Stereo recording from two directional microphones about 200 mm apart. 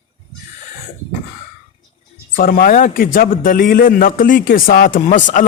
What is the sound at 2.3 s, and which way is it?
A man's voice, 45° left (ahead or behind).